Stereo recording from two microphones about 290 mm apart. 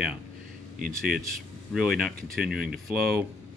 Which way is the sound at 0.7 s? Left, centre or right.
Right.